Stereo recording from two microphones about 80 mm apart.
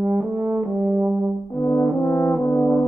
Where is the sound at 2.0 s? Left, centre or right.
Left.